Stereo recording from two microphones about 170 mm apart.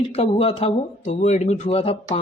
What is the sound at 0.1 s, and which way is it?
Speech, 35° left (ahead or behind).